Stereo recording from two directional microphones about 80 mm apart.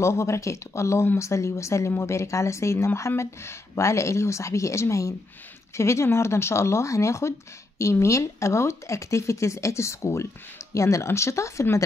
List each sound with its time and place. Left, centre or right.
0.0 s speech: left